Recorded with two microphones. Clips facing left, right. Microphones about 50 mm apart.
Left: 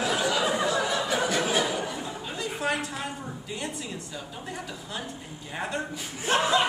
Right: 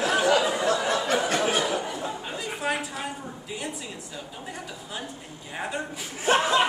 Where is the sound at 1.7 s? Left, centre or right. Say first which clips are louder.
Right 2 dB; centre.